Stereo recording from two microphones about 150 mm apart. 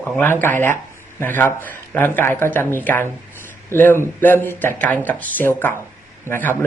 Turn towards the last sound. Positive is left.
turn(degrees=15)  # may be behind; listen again after turning